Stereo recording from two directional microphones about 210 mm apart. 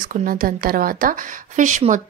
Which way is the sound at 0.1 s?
40° right (ahead or behind).